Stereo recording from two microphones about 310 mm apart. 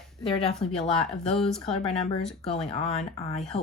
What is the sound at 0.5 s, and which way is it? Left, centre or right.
Speech, centre.